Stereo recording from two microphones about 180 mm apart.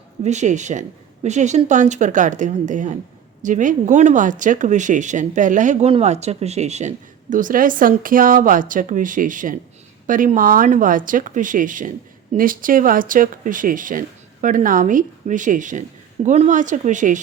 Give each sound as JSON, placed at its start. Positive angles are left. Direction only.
{"t": 0.2, "sound": "speech", "side_deg": -40}